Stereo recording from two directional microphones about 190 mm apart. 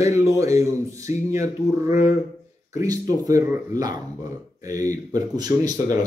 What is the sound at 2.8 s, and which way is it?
Speech, 20° right (ahead or behind).